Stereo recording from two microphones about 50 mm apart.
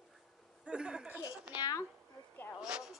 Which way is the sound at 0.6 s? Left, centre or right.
Centre.